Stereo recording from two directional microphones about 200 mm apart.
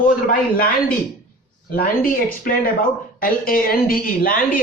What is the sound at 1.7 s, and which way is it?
Speech, 45° left (ahead or behind).